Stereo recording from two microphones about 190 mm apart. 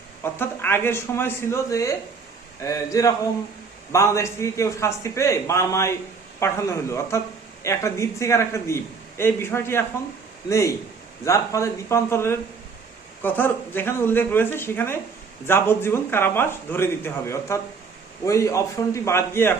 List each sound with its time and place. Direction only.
0.2 s a man's voice: 10° left (ahead or behind)